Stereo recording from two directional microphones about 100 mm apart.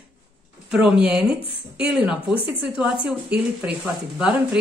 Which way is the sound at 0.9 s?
10° right (ahead or behind).